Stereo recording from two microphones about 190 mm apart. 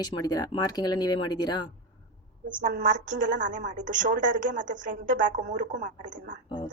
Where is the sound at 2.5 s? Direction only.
45° right (ahead or behind).